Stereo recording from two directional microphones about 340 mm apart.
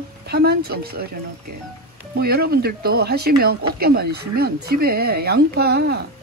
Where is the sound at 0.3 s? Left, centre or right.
Right.